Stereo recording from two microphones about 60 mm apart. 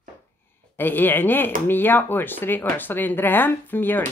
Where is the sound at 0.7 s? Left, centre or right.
Left.